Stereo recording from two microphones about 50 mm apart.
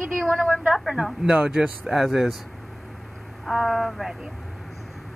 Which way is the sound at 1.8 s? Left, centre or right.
Centre.